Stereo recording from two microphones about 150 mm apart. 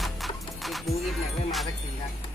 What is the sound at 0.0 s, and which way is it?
Music, centre (ahead or behind).